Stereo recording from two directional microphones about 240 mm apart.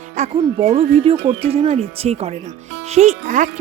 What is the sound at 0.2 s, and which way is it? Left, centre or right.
Speech, right.